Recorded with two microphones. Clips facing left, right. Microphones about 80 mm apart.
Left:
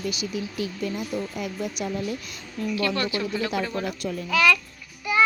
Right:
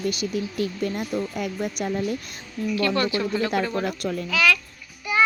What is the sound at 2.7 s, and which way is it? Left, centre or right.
Speech, centre.